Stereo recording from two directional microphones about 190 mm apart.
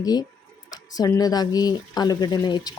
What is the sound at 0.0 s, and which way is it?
Speech, 20° left (ahead or behind).